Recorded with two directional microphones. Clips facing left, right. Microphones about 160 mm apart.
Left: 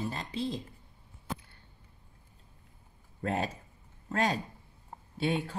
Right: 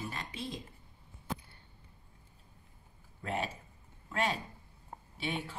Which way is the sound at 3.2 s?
40° left (ahead or behind).